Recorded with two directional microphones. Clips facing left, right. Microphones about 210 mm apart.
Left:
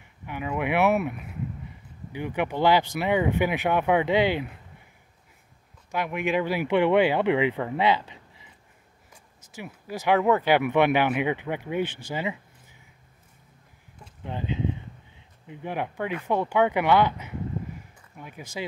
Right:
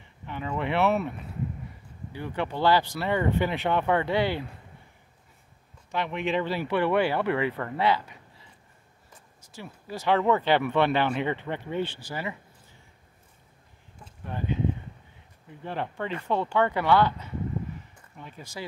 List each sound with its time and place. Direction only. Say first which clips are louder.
0.3 s speech: left 2 dB; 10° left (ahead or behind)
2.1 s speech: left 3 dB; 15° left (ahead or behind)
5.9 s speech: left 2 dB; 10° left (ahead or behind)
14.2 s speech: even; 20° left (ahead or behind)